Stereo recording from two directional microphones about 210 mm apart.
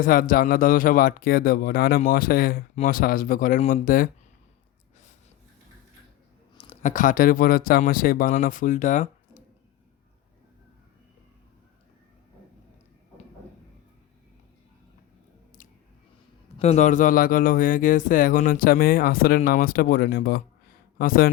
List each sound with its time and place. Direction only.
0.0 s speech: 40° left (ahead or behind)
6.6 s speech: 30° left (ahead or behind)
16.6 s speech: 30° left (ahead or behind)